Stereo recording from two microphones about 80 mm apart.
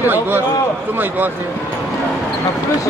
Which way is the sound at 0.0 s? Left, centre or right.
Right.